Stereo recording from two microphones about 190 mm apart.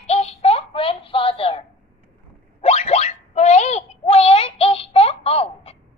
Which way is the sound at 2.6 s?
35° left (ahead or behind).